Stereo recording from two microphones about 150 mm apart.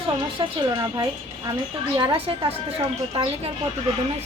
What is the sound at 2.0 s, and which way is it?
Speech, 35° right (ahead or behind).